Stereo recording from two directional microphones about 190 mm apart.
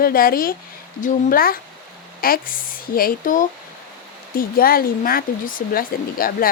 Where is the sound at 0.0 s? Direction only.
50° left (ahead or behind).